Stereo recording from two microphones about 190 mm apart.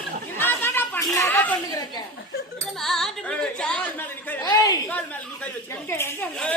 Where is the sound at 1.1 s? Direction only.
15° left (ahead or behind).